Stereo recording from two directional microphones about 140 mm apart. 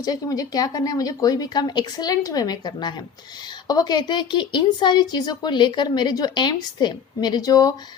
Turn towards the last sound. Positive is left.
turn(degrees=25)  # may be behind; listen again after turning